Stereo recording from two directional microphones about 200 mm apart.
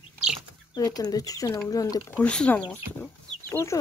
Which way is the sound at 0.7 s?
20° left (ahead or behind).